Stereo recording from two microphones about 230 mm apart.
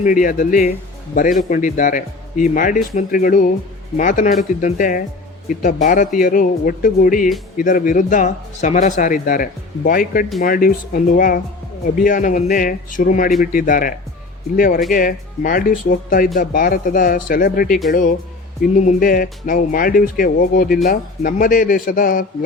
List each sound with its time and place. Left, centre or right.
0.0 s speech: left
17.7 s speech: centre
18.8 s speech: left